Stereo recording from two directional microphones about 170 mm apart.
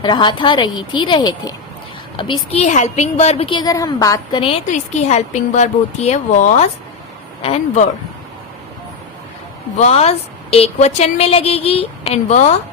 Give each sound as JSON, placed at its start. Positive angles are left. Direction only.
{"t": 0.0, "sound": "a woman's voice", "side_deg": 25}
{"t": 9.8, "sound": "a woman's voice", "side_deg": 40}